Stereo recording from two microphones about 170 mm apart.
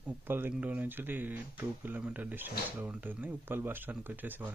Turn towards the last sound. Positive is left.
turn(degrees=-10)  # may be behind; listen again after turning